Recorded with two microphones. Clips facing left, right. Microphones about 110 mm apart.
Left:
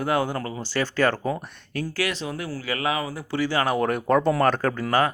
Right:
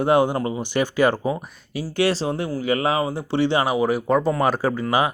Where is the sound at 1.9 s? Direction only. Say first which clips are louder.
Right 10 dB; 30° right (ahead or behind).